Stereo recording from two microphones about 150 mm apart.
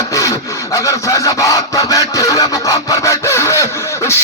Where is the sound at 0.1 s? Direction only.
20° left (ahead or behind).